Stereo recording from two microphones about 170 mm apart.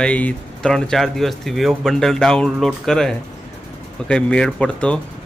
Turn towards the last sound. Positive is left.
turn(degrees=5)  # may be behind; listen again after turning